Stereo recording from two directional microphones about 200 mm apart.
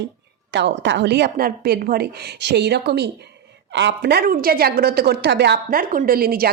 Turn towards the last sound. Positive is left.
turn(degrees=-50)  # may be behind; listen again after turning